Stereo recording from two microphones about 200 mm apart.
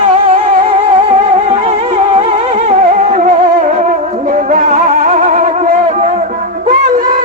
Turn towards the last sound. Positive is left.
turn(degrees=-35)  # may be behind; listen again after turning